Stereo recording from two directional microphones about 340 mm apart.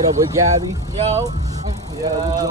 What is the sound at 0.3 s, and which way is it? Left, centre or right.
Speech, centre.